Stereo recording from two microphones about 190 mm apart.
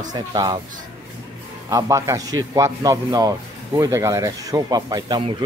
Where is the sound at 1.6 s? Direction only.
20° right (ahead or behind).